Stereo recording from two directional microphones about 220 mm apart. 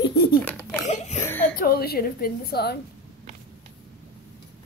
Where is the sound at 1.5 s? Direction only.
45° left (ahead or behind).